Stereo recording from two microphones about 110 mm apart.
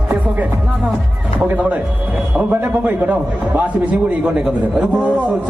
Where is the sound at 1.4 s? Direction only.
15° right (ahead or behind).